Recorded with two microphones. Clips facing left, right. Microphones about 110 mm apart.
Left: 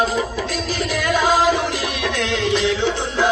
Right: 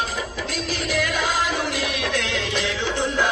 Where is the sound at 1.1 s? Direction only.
90° left.